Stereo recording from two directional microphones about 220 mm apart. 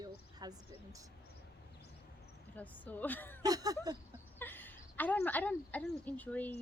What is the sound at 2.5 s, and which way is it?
Speech, 5° left (ahead or behind).